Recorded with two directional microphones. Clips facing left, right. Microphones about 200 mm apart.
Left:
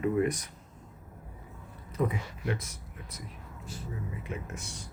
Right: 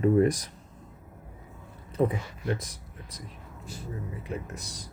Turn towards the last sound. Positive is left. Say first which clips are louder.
# right 1 dB
turn(degrees=-35)  # may be behind; listen again after turning